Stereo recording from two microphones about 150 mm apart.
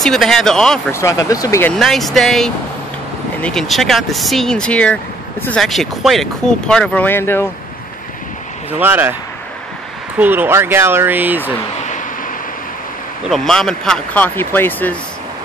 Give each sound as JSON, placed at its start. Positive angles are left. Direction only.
{"t": 0.0, "sound": "speech", "side_deg": 5}
{"t": 0.9, "sound": "speech", "side_deg": 20}
{"t": 1.7, "sound": "speech", "side_deg": 0}
{"t": 8.7, "sound": "speech", "side_deg": -15}
{"t": 10.1, "sound": "speech", "side_deg": -10}
{"t": 13.3, "sound": "speech", "side_deg": 5}